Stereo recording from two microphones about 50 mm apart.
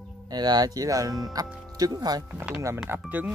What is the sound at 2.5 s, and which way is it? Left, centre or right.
Speech, right.